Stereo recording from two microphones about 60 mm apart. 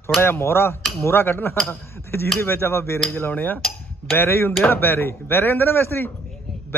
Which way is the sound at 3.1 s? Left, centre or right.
Left.